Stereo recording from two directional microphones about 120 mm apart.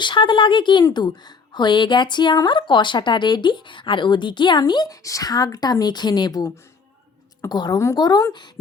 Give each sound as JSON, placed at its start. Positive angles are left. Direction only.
{"t": 0.0, "sound": "a woman's voice", "side_deg": 40}